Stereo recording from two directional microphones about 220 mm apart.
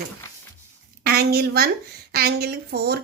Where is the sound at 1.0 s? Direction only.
45° right (ahead or behind).